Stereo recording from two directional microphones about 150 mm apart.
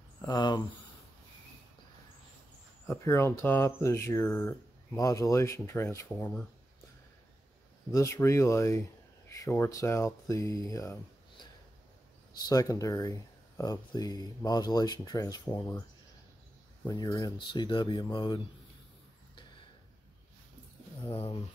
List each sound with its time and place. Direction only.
0.2 s speech: 25° left (ahead or behind)
2.9 s speech: 20° left (ahead or behind)
7.9 s speech: 20° left (ahead or behind)
12.4 s speech: 25° left (ahead or behind)
16.8 s speech: 25° left (ahead or behind)